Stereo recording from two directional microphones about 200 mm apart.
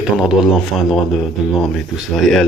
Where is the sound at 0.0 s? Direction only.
5° right (ahead or behind).